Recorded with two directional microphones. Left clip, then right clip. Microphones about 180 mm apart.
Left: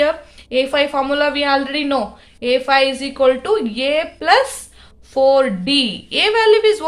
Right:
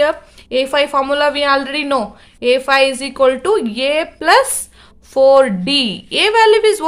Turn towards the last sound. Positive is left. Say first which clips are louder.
# right 2 dB
turn(degrees=-40)  # may be behind; listen again after turning